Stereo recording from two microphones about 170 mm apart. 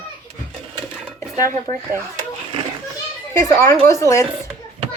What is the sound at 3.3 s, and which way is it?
Speech, 15° left (ahead or behind).